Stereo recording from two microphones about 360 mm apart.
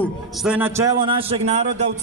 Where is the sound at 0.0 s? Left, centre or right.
Centre.